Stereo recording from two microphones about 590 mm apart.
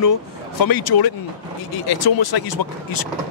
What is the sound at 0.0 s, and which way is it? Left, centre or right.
Speech, left.